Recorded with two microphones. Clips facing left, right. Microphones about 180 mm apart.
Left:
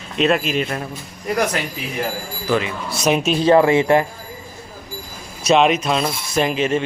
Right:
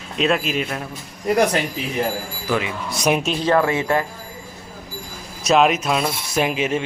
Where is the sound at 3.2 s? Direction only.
15° left (ahead or behind).